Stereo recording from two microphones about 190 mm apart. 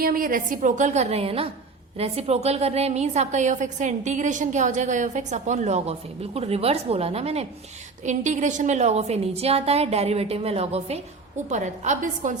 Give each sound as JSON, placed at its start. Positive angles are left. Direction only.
{"t": 0.0, "sound": "a woman's voice", "side_deg": -50}